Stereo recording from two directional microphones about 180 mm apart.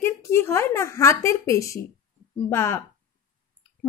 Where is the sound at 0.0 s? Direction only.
15° left (ahead or behind).